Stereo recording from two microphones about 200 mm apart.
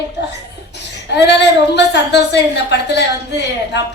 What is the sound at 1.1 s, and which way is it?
A woman's voice, 60° left (ahead or behind).